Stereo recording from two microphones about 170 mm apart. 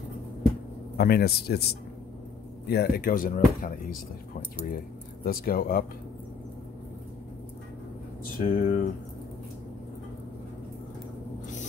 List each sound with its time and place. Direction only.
0.9 s speech: 65° left (ahead or behind)
8.4 s speech: 50° left (ahead or behind)